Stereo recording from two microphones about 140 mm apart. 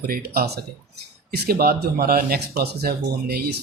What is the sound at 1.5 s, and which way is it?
Speech, 90° right.